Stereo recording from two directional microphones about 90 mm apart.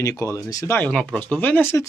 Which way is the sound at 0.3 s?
40° left (ahead or behind).